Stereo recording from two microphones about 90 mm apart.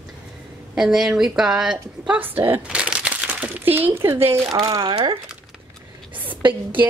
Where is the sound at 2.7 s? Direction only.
10° right (ahead or behind); by 4.4 s 25° right (ahead or behind).